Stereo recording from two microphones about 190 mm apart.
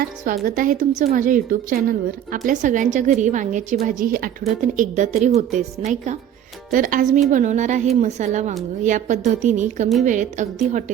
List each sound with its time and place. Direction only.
0.4 s a woman's voice: 45° right (ahead or behind)